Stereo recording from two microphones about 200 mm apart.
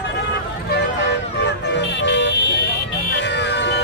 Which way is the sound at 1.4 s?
60° left (ahead or behind).